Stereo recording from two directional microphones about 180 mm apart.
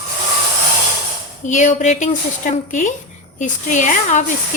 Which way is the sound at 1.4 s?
40° left (ahead or behind).